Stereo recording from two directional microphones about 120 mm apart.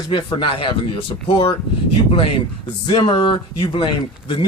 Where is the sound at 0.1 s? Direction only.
45° left (ahead or behind).